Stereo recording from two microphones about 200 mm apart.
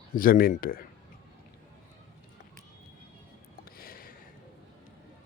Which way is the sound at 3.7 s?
45° left (ahead or behind).